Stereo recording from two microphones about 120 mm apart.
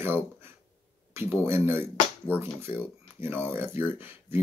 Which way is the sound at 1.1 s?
20° right (ahead or behind).